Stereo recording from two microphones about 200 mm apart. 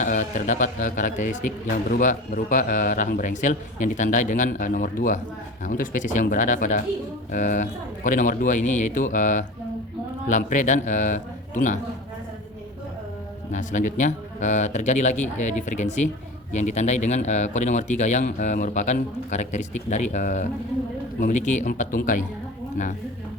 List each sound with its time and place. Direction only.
0.0 s a man's voice: 40° left (ahead or behind)
13.5 s a man's voice: 40° left (ahead or behind)